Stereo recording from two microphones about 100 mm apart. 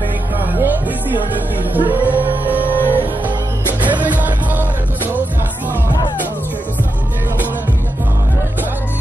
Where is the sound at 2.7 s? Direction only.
20° left (ahead or behind).